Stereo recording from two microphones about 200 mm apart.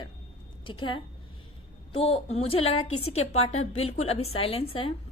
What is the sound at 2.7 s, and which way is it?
Speech, 90° left.